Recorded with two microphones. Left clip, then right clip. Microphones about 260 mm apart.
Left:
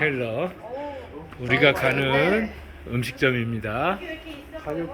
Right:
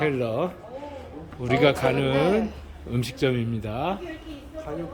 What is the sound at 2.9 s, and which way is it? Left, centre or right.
Speech, centre.